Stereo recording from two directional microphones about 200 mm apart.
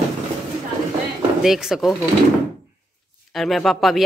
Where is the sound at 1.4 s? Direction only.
Centre (ahead or behind).